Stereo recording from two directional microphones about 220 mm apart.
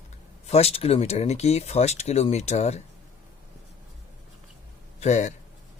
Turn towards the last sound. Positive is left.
turn(degrees=30)  # may be behind; listen again after turning